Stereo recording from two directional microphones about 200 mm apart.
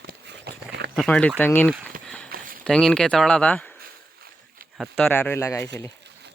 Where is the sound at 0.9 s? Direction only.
5° left (ahead or behind).